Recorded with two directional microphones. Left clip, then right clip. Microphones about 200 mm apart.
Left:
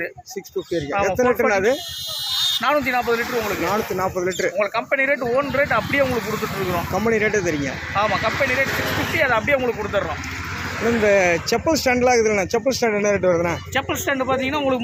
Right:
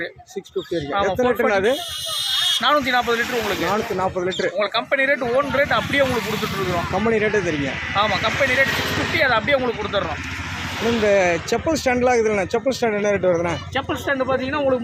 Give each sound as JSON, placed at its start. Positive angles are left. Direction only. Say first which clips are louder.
{"t": 1.0, "sound": "speech", "louder": "left 1 dB", "side_deg": -5}
{"t": 8.5, "sound": "speech", "louder": "right 2 dB", "side_deg": -55}
{"t": 9.1, "sound": "speech", "louder": "right 1 dB", "side_deg": 5}
{"t": 13.7, "sound": "speech", "louder": "even", "side_deg": 25}